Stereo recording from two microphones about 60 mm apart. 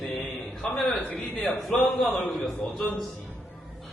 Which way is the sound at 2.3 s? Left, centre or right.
Centre.